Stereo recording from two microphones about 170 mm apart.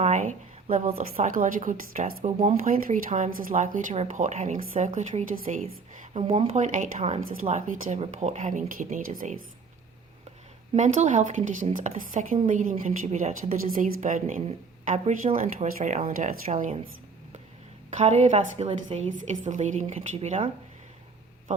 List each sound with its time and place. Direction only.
0.0 s a woman's voice: 45° right (ahead or behind)
0.9 s a woman's voice: 35° right (ahead or behind)
1.3 s a woman's voice: 55° right (ahead or behind)
6.1 s a woman's voice: 30° right (ahead or behind)
6.6 s a woman's voice: 45° right (ahead or behind)
10.8 s a woman's voice: 45° right (ahead or behind)
13.5 s a woman's voice: 55° right (ahead or behind)
17.9 s a woman's voice: 40° right (ahead or behind)